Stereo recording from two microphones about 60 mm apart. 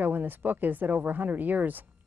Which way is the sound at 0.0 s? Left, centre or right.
Right.